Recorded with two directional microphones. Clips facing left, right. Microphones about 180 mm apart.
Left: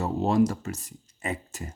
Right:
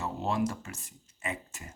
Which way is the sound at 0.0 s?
40° left (ahead or behind).